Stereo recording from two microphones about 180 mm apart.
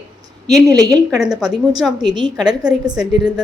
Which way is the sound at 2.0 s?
25° right (ahead or behind).